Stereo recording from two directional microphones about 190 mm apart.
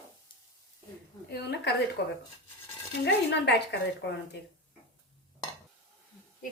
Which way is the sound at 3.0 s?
65° left (ahead or behind).